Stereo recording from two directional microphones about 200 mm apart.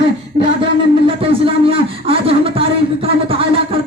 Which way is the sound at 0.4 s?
30° right (ahead or behind).